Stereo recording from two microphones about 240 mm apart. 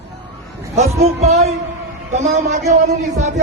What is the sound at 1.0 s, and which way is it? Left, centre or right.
Speech, right.